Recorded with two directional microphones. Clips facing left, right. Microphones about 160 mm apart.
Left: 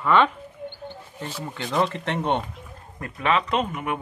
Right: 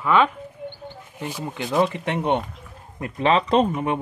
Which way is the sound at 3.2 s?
30° right (ahead or behind).